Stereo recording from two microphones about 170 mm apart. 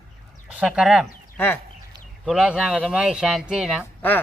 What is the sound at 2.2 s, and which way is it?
Speech, 5° right (ahead or behind).